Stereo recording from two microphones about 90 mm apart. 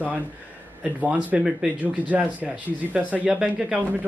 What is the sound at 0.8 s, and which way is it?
Speech, 15° right (ahead or behind).